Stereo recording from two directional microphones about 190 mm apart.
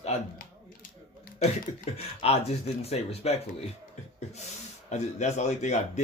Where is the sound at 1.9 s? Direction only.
35° left (ahead or behind).